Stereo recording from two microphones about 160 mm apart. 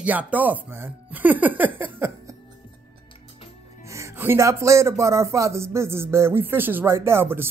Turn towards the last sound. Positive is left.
turn(degrees=-15)  # may be behind; listen again after turning